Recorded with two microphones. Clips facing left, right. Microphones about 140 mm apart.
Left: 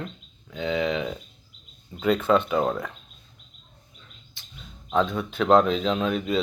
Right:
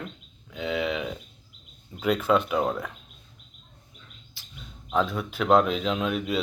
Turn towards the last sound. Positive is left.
turn(degrees=-5)  # may be behind; listen again after turning